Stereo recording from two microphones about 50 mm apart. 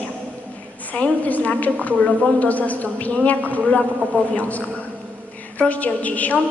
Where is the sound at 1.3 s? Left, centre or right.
Left.